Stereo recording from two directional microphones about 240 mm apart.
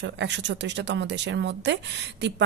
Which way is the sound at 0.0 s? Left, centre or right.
Right.